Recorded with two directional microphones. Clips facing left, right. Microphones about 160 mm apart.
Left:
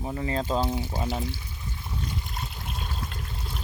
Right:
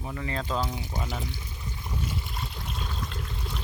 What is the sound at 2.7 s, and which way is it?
Water, 45° left (ahead or behind).